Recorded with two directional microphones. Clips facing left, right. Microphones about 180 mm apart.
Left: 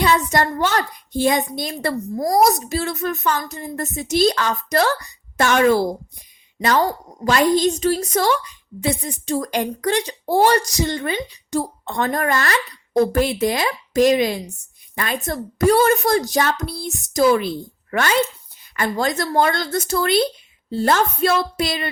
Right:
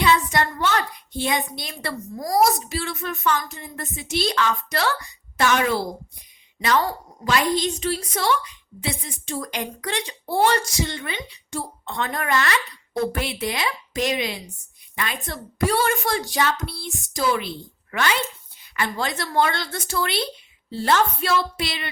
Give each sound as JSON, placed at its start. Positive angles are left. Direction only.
{"t": 0.0, "sound": "a child's voice", "side_deg": 45}
{"t": 7.3, "sound": "a woman's voice", "side_deg": 45}